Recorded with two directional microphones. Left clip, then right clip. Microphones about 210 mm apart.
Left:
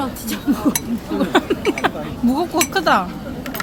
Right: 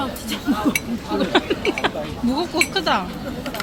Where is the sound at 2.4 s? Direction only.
25° left (ahead or behind).